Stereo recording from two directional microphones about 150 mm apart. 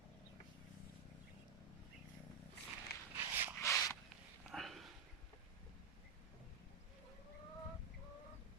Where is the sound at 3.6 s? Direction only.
20° left (ahead or behind).